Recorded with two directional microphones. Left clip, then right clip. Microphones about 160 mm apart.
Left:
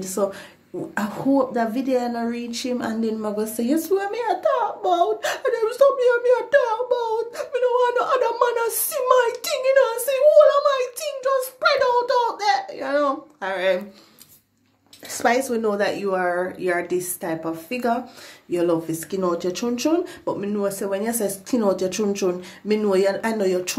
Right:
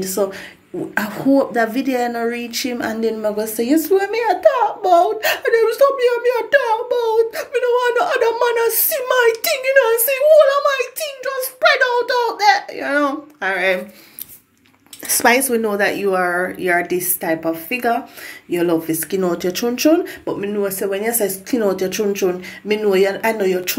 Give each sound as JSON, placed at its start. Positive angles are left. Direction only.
{"t": 0.0, "sound": "speech", "side_deg": 10}
{"t": 1.2, "sound": "a woman's voice", "side_deg": 0}
{"t": 11.6, "sound": "a woman's voice", "side_deg": 0}
{"t": 15.0, "sound": "a woman's voice", "side_deg": -5}
{"t": 20.2, "sound": "speech", "side_deg": 15}